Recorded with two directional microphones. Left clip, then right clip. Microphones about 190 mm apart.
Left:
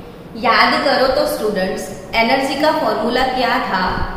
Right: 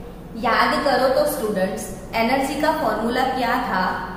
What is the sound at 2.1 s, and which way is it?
A woman's voice, centre (ahead or behind).